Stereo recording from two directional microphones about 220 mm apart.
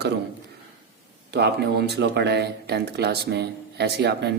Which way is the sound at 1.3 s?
50° right (ahead or behind).